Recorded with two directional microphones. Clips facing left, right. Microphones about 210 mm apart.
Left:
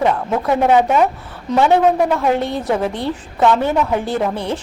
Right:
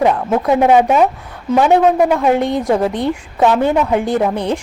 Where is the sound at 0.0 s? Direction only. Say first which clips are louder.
Right 3 dB; 15° right (ahead or behind).